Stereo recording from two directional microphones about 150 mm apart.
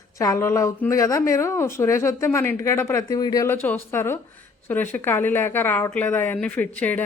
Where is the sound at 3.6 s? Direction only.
15° left (ahead or behind).